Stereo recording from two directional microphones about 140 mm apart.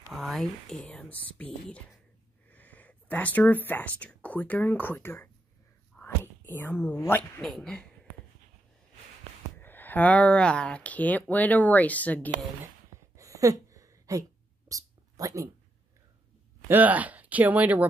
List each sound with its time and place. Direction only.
0.1 s speech: centre (ahead or behind)
5.9 s whispering: 15° left (ahead or behind)
7.0 s speech: 15° left (ahead or behind)
9.6 s speech: 15° left (ahead or behind)
13.1 s a sound: 25° right (ahead or behind)
16.6 s speech: 10° right (ahead or behind)